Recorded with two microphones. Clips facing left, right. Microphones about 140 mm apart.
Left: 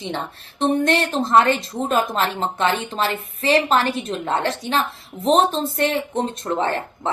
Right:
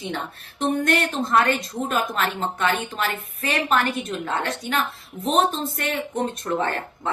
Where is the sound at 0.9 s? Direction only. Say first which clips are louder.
Left 3 dB; 25° left (ahead or behind).